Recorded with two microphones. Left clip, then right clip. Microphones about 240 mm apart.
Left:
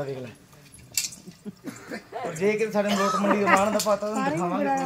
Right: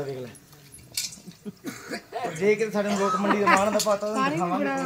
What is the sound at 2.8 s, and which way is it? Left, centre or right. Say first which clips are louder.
Speech: left 1 dB; left.